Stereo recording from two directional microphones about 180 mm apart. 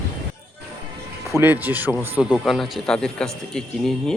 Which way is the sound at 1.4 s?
10° right (ahead or behind).